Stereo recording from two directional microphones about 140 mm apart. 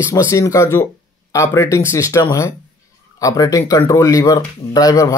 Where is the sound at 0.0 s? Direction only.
20° left (ahead or behind).